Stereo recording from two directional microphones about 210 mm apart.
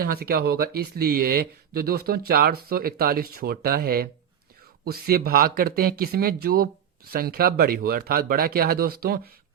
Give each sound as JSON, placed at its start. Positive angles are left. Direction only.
{"t": 0.0, "sound": "speech", "side_deg": -45}